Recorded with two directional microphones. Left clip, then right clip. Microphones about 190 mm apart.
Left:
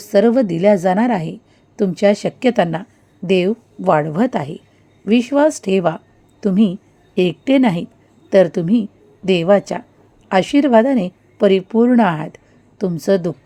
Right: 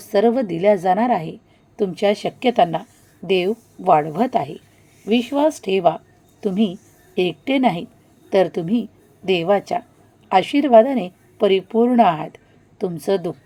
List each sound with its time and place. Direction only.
0.0 s a woman's voice: 25° left (ahead or behind)